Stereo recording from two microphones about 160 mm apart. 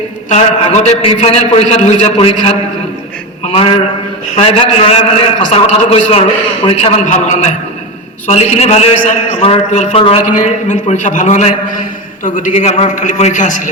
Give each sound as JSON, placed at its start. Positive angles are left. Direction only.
{"t": 0.3, "sound": "a man's voice", "side_deg": 45}
{"t": 3.4, "sound": "a sound", "side_deg": 35}
{"t": 4.4, "sound": "a man's voice", "side_deg": 35}